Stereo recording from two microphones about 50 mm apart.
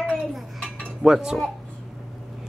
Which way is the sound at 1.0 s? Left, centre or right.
Centre.